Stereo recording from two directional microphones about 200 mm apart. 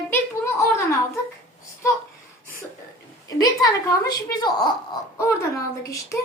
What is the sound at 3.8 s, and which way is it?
A woman's voice, 15° left (ahead or behind).